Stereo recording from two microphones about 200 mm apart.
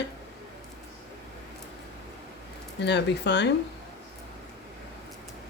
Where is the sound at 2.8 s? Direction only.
60° left (ahead or behind).